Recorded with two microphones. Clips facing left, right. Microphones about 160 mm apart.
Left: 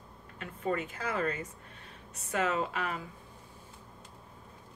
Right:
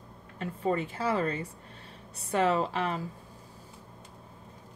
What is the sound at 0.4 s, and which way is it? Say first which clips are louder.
Speech: right 4 dB; 30° right (ahead or behind).